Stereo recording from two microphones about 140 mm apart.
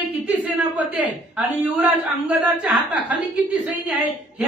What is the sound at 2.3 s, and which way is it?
Speech, 10° right (ahead or behind).